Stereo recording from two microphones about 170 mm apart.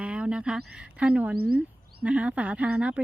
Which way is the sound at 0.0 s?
5° right (ahead or behind).